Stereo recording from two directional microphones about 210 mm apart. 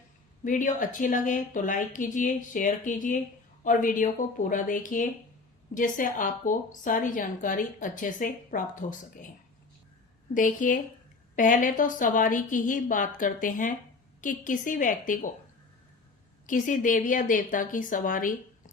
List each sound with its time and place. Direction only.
0.4 s a woman's voice: 40° left (ahead or behind)
10.3 s a woman's voice: 40° left (ahead or behind)
16.5 s a woman's voice: 40° left (ahead or behind)